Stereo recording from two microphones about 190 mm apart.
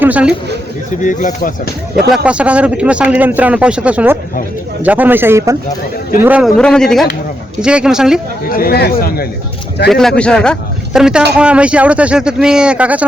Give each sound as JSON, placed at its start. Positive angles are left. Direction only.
{"t": 0.0, "sound": "speech", "side_deg": -5}
{"t": 1.0, "sound": "speech", "side_deg": 45}
{"t": 2.1, "sound": "a man's voice", "side_deg": -5}
{"t": 6.6, "sound": "speech", "side_deg": 5}
{"t": 8.4, "sound": "speech", "side_deg": 50}
{"t": 9.9, "sound": "a man's voice", "side_deg": 5}